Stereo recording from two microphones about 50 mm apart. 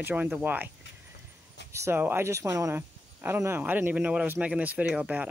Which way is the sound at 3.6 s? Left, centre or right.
Right.